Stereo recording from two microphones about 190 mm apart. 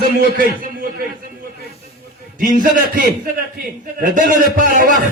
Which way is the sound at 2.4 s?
45° right (ahead or behind).